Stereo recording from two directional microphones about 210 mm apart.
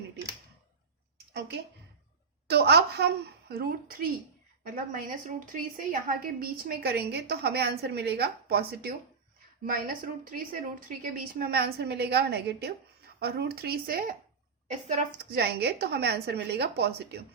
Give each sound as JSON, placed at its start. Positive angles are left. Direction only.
{"t": 1.4, "sound": "a woman's voice", "side_deg": -50}
{"t": 15.4, "sound": "a woman's voice", "side_deg": -50}